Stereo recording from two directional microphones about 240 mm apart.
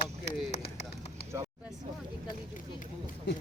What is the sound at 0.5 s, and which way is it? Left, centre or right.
Run, left.